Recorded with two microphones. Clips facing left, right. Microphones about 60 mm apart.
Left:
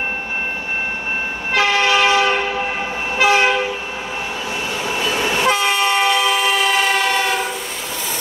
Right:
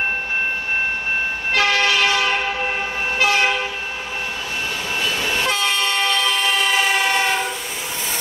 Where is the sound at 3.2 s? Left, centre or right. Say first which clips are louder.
Left 4 dB; left.